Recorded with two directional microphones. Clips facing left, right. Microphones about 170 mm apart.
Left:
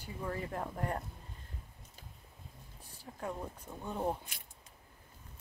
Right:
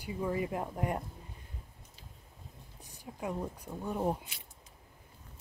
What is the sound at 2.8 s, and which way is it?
Speech, 15° right (ahead or behind).